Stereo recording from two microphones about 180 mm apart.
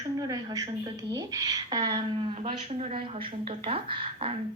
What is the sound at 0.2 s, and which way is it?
A woman's voice, 20° right (ahead or behind).